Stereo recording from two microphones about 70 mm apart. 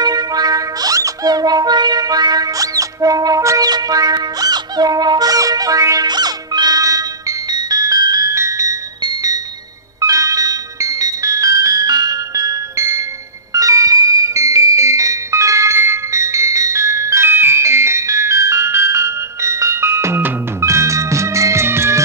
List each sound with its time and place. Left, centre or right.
0.0 s music: right
6.0 s music: right
8.4 s music: right
9.0 s music: right
13.5 s music: right